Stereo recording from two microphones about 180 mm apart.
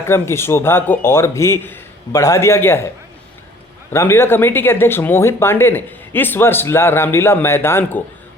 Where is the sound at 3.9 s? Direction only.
15° left (ahead or behind).